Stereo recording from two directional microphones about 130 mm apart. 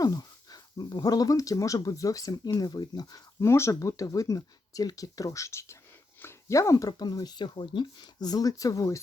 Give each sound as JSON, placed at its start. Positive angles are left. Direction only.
{"t": 0.0, "sound": "speech", "side_deg": 30}